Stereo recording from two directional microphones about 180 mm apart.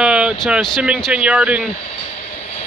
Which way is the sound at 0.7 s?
5° right (ahead or behind).